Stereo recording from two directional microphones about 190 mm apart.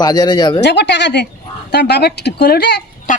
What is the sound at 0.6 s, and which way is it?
Speech, 65° left (ahead or behind).